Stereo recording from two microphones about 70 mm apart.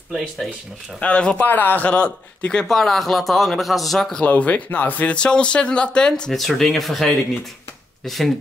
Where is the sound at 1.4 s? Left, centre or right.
Left; by 4.2 s centre.